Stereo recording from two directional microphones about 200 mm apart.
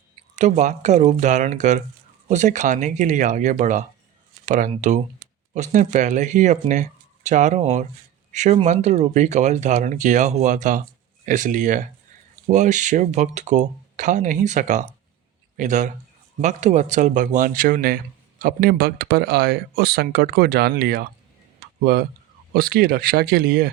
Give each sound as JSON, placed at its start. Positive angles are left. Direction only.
{"t": 0.3, "sound": "speech", "side_deg": -35}